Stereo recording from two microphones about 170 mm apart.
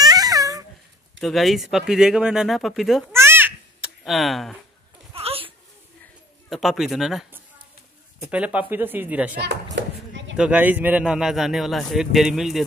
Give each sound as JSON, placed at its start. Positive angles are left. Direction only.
{"t": 0.0, "sound": "babbling", "side_deg": -20}
{"t": 1.2, "sound": "speech", "side_deg": 0}
{"t": 3.1, "sound": "babbling", "side_deg": -15}
{"t": 5.1, "sound": "a sound", "side_deg": -35}
{"t": 6.5, "sound": "speech", "side_deg": 0}
{"t": 9.4, "sound": "a sound", "side_deg": -90}
{"t": 10.3, "sound": "speech", "side_deg": -5}